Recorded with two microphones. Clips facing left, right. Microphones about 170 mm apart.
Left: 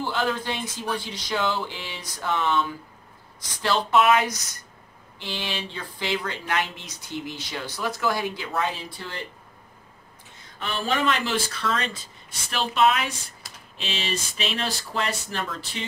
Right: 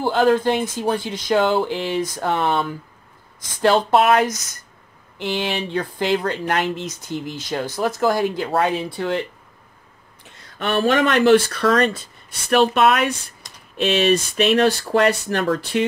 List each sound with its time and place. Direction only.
0.0 s speech: 50° right (ahead or behind)
8.5 s speech: 60° right (ahead or behind)
10.6 s speech: 70° right (ahead or behind)
13.4 s typing: 5° left (ahead or behind)
13.7 s speech: 60° right (ahead or behind)